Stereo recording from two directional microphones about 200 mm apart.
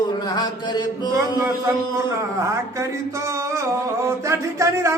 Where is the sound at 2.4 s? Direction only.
15° right (ahead or behind).